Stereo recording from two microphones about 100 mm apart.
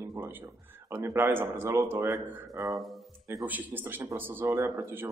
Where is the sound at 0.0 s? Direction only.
25° right (ahead or behind).